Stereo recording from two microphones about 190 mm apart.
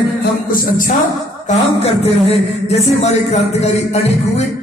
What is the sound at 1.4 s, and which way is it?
A man's voice, 30° left (ahead or behind).